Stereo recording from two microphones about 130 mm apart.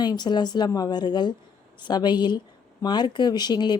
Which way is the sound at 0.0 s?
35° left (ahead or behind).